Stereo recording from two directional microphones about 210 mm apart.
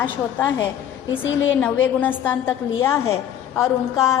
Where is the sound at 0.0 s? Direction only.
10° left (ahead or behind).